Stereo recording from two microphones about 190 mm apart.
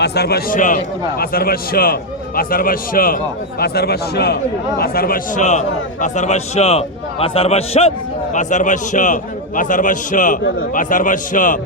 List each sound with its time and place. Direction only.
0.0 s a man's voice: 55° left (ahead or behind)